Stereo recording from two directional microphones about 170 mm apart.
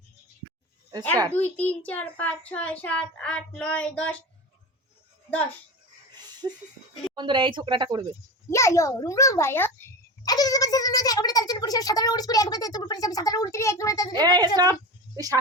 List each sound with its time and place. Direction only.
1.5 s speech: 10° left (ahead or behind)
6.4 s a sound: 15° right (ahead or behind)
7.2 s speech: 30° right (ahead or behind)
8.4 s speech: 15° left (ahead or behind)
14.2 s a woman's voice: 25° right (ahead or behind)